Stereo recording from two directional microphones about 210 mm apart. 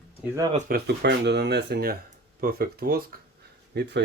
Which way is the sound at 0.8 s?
55° right (ahead or behind).